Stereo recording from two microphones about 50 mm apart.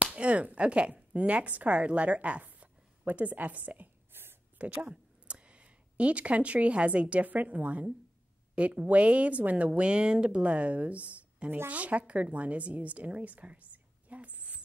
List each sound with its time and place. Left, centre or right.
0.0 s speech: right
4.1 s a sound: right
4.6 s a woman's voice: right